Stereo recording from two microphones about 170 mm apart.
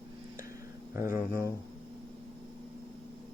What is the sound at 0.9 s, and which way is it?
Speech, 15° right (ahead or behind).